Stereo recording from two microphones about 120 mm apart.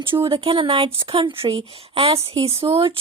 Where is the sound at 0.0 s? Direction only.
45° right (ahead or behind).